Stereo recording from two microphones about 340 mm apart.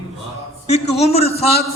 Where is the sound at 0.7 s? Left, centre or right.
Centre.